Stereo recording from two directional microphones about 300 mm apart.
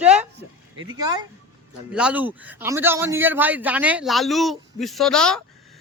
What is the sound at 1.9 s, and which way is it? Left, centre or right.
A man's voice, centre.